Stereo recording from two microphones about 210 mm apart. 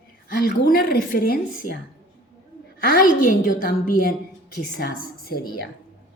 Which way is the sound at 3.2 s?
40° left (ahead or behind).